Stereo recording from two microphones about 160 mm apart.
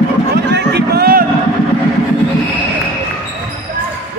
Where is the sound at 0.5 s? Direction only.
90° right; by 1.2 s 75° right (ahead or behind).